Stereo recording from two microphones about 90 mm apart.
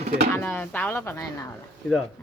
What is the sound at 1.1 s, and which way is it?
Speech, 35° left (ahead or behind).